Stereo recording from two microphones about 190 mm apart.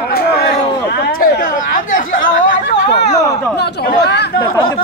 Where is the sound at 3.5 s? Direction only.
60° left (ahead or behind).